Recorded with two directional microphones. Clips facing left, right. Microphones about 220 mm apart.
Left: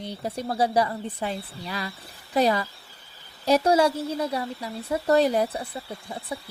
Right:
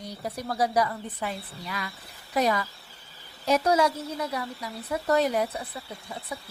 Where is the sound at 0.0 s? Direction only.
30° left (ahead or behind).